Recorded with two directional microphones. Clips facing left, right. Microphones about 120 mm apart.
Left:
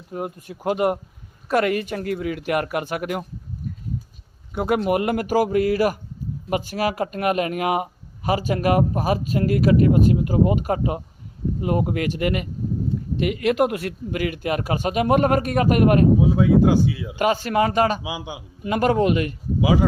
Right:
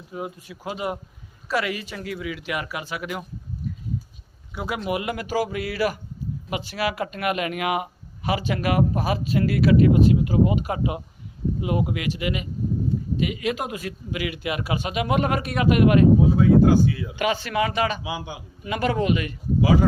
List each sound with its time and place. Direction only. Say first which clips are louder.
0.1 s a man's voice: left 3 dB; 50° left (ahead or behind)
4.5 s a man's voice: left 7 dB; 50° left (ahead or behind)
14.2 s a man's voice: left 4 dB; 45° left (ahead or behind)
16.4 s speech: even; 20° left (ahead or behind)
17.2 s a man's voice: left 5 dB; 40° left (ahead or behind)
18.0 s speech: left 1 dB; 20° left (ahead or behind)
18.6 s a man's voice: left 5 dB; 45° left (ahead or behind)